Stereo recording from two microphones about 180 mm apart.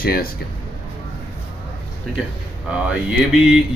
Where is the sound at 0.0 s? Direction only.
60° left (ahead or behind).